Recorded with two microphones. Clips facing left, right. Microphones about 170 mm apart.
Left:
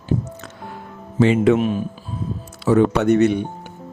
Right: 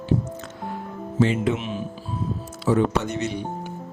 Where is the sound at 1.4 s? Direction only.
50° left (ahead or behind).